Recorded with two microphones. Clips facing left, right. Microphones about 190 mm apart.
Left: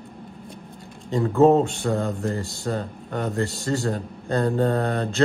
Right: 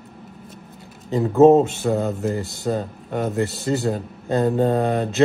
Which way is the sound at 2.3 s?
20° right (ahead or behind).